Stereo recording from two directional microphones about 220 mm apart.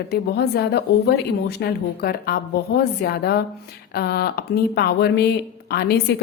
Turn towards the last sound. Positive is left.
turn(degrees=45)  # may be behind; listen again after turning